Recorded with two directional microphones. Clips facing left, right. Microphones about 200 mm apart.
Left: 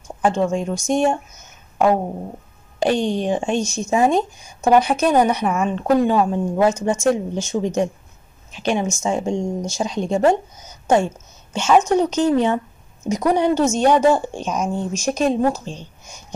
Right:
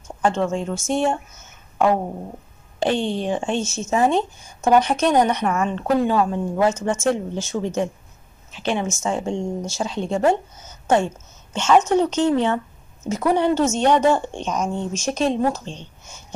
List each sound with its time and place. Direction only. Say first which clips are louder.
0.2 s a woman's voice: left 2 dB; 10° left (ahead or behind)